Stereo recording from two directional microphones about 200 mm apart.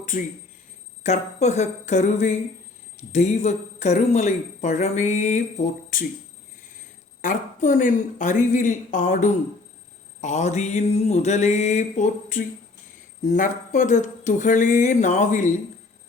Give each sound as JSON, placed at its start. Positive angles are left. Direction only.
{"t": 0.0, "sound": "a sound", "side_deg": 40}
{"t": 1.0, "sound": "speech", "side_deg": 35}
{"t": 7.2, "sound": "speech", "side_deg": 40}